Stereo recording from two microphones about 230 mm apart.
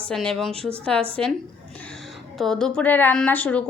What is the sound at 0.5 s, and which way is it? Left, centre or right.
Speech, right.